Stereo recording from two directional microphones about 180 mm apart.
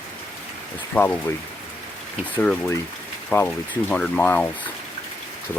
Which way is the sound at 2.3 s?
5° left (ahead or behind).